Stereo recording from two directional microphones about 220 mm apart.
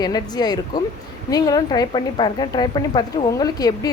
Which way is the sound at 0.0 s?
20° left (ahead or behind).